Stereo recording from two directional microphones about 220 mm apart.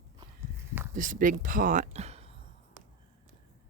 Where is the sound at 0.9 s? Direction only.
35° right (ahead or behind).